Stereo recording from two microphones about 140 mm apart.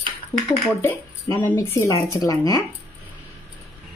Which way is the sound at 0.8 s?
15° left (ahead or behind).